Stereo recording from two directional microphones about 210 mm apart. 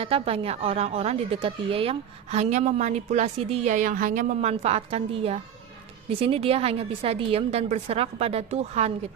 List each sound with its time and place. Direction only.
0.0 s a woman's voice: 25° right (ahead or behind)